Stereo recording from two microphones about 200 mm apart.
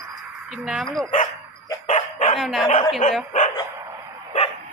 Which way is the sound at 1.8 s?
35° left (ahead or behind).